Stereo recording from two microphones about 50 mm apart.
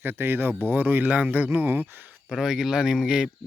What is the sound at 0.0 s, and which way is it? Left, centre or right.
Speech, right.